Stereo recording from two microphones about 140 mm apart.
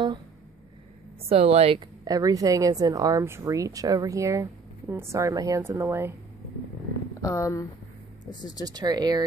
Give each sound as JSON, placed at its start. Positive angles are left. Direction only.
{"t": 1.3, "sound": "a woman's voice", "side_deg": -45}
{"t": 1.8, "sound": "a woman's voice", "side_deg": -25}
{"t": 7.2, "sound": "speech", "side_deg": 20}
{"t": 8.6, "sound": "a woman's voice", "side_deg": -30}